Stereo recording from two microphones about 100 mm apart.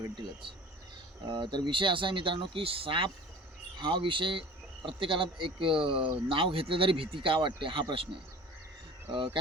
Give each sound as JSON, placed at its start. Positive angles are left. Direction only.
{"t": 1.3, "sound": "speech", "side_deg": -50}
{"t": 3.8, "sound": "speech", "side_deg": -50}
{"t": 9.1, "sound": "speech", "side_deg": -60}